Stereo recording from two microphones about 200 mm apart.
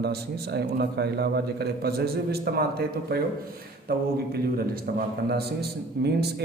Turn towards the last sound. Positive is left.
turn(degrees=-55)  # may be behind; listen again after turning